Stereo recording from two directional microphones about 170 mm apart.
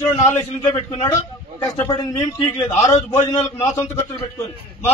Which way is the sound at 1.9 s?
30° left (ahead or behind).